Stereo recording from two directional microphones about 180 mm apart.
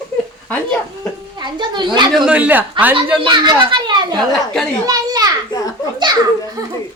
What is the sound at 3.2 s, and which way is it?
Speech, 25° right (ahead or behind).